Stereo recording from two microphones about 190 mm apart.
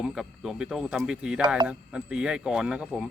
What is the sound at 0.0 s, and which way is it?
Speech, 5° right (ahead or behind).